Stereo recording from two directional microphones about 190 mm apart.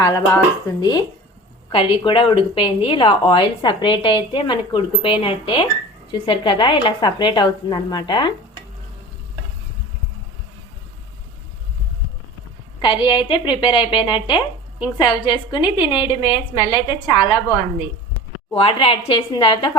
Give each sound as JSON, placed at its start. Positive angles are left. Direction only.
{"t": 0.0, "sound": "a woman's voice", "side_deg": 20}
{"t": 12.8, "sound": "a woman's voice", "side_deg": 25}
{"t": 18.5, "sound": "a woman's voice", "side_deg": 30}